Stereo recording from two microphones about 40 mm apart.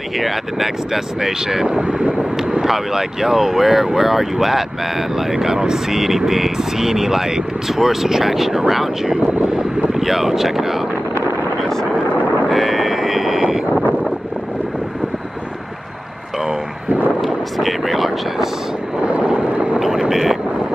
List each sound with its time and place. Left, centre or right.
0.2 s speech: centre
1.8 s wind noise: right
2.6 s speech: centre
12.4 s a sound: centre
17.2 s vehicle: centre
19.0 s vehicle: right
19.8 s vehicle: centre